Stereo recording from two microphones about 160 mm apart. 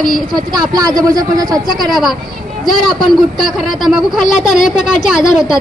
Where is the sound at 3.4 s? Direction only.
Centre (ahead or behind).